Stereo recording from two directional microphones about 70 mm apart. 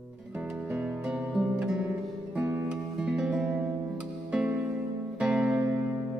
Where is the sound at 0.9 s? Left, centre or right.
Centre.